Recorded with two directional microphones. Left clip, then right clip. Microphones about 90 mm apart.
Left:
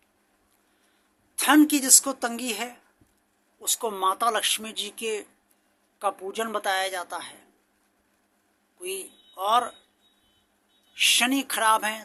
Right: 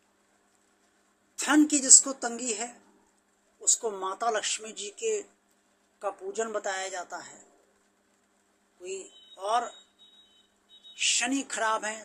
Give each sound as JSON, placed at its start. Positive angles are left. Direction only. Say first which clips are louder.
{"t": 1.4, "sound": "speech", "louder": "left 5 dB", "side_deg": 30}
{"t": 8.8, "sound": "a man's voice", "louder": "left 4 dB", "side_deg": 30}
{"t": 10.9, "sound": "speech", "louder": "left 6 dB", "side_deg": 35}